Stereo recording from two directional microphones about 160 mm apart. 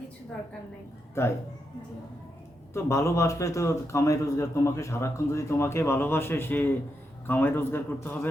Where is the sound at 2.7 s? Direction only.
20° left (ahead or behind).